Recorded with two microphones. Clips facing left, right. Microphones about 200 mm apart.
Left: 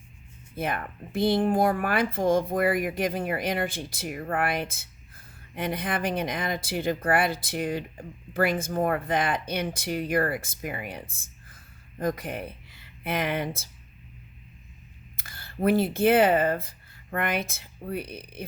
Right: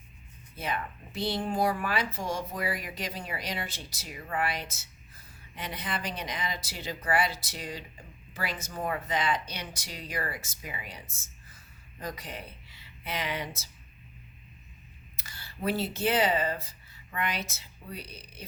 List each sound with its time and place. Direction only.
0.5 s speech: 55° left (ahead or behind)
15.1 s speech: 55° left (ahead or behind)